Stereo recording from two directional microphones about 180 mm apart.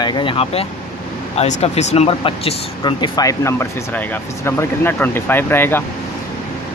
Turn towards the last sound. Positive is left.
turn(degrees=10)  # may be behind; listen again after turning